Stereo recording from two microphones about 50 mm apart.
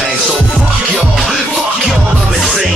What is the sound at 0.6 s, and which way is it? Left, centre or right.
Music, centre.